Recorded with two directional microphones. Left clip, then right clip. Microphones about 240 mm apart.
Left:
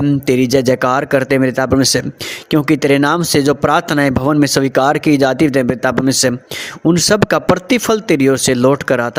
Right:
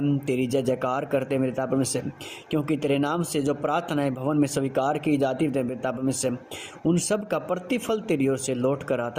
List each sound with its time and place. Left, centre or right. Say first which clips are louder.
0.3 s a man's voice: left 13 dB; left